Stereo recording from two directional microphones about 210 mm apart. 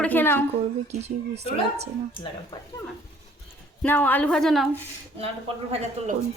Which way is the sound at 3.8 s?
10° left (ahead or behind).